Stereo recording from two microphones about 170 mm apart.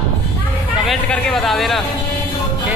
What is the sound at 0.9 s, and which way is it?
Speech, 5° left (ahead or behind).